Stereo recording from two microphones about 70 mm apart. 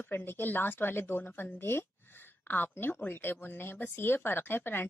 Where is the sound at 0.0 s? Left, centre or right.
Left.